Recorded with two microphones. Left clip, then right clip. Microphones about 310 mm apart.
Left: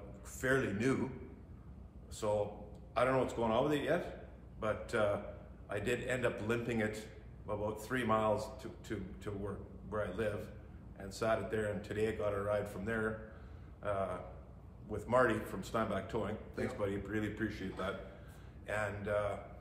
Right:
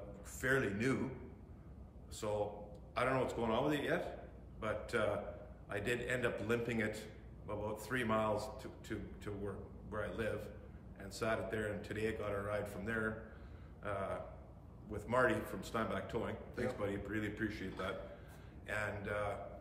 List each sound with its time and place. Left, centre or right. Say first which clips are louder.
0.4 s a man's voice: left 2 dB; centre
2.2 s a man's voice: left 4 dB; centre